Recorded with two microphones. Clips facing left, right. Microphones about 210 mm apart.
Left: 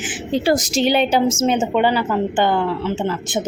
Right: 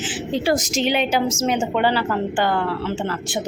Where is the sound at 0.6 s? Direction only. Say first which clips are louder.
Left 4 dB; 35° left (ahead or behind).